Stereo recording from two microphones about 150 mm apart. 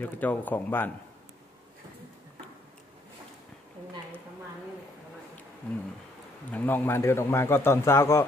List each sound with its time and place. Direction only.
0.0 s a man's voice: 10° left (ahead or behind)
5.6 s a man's voice: 10° left (ahead or behind)